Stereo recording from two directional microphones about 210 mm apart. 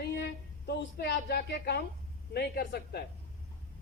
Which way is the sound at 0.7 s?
50° left (ahead or behind).